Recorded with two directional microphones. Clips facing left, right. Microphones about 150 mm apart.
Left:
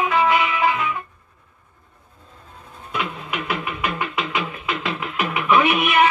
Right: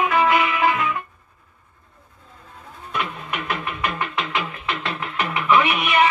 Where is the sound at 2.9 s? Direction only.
5° left (ahead or behind).